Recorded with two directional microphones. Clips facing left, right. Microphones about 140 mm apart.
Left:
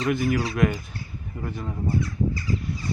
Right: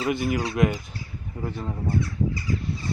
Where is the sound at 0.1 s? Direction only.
25° right (ahead or behind).